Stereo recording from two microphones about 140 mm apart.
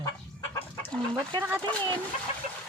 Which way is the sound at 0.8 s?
5° left (ahead or behind).